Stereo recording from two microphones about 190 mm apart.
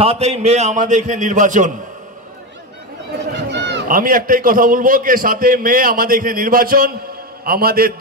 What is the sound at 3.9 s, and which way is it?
A man's voice, 45° right (ahead or behind).